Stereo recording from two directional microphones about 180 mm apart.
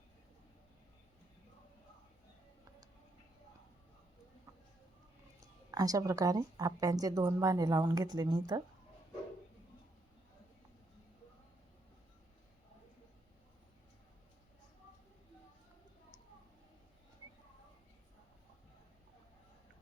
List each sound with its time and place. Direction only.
5.4 s a woman's voice: 20° right (ahead or behind)